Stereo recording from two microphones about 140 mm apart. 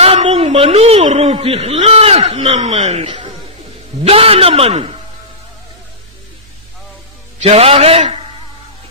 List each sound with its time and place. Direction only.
0.0 s a man's voice: 45° right (ahead or behind)
7.4 s a man's voice: 45° right (ahead or behind)